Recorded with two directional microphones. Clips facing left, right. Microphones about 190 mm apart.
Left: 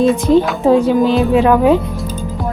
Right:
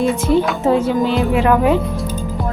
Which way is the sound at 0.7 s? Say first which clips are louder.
Left 5 dB; 15° left (ahead or behind).